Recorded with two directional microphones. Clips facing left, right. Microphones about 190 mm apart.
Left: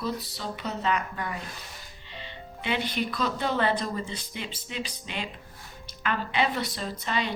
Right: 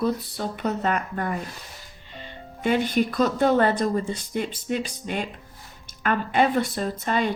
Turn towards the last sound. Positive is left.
turn(degrees=-50)  # may be behind; listen again after turning